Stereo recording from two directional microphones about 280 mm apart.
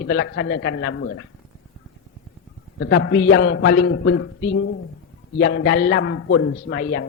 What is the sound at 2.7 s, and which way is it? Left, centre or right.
A man's voice, left.